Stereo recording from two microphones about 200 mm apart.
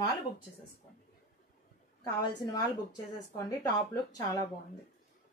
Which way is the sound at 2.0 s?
20° left (ahead or behind).